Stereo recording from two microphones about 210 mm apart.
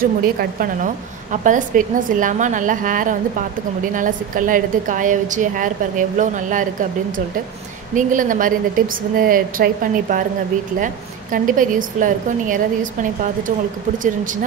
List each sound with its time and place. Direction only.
0.0 s a woman's voice: 45° right (ahead or behind)
7.9 s a woman's voice: 40° right (ahead or behind)
11.3 s a woman's voice: 40° right (ahead or behind)